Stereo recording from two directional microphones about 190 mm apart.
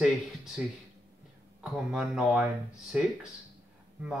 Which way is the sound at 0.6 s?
5° right (ahead or behind).